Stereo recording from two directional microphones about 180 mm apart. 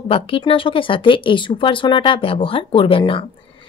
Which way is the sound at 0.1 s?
30° left (ahead or behind).